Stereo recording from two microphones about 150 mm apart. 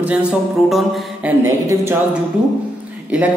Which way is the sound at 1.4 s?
20° right (ahead or behind).